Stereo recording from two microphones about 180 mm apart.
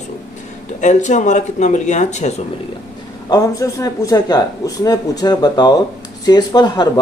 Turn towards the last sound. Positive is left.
turn(degrees=25)  # may be behind; listen again after turning